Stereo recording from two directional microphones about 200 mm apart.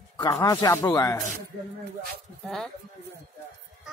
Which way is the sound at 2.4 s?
Centre (ahead or behind).